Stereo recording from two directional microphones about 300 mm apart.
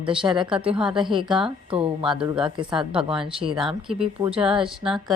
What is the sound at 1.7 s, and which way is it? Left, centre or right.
Speech, centre.